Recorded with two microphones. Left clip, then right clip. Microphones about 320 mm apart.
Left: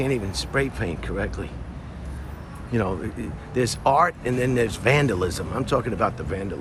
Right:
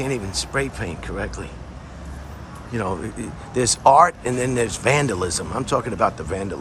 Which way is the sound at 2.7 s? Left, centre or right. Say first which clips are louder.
Even; centre.